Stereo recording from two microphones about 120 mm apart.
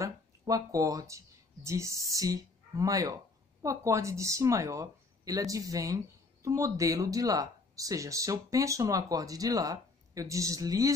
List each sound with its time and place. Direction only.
0.0 s speech: 30° right (ahead or behind)